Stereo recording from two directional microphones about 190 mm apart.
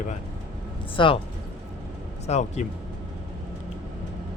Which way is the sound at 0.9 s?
25° left (ahead or behind).